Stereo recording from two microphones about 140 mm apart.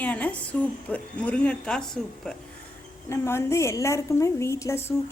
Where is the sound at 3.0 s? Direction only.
20° left (ahead or behind).